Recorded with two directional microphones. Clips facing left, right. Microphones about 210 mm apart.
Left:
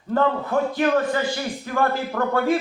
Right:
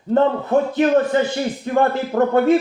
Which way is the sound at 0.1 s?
25° right (ahead or behind).